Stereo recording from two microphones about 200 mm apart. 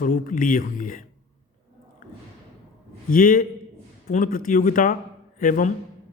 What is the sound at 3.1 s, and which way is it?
A man's voice, 45° left (ahead or behind).